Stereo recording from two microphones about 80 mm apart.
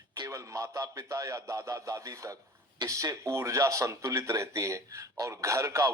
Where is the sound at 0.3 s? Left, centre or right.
Right.